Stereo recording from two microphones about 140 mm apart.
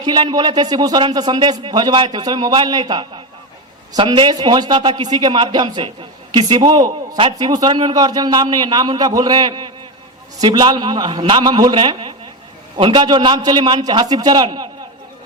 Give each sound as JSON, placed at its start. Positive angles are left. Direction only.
{"t": 0.0, "sound": "a man's voice", "side_deg": -30}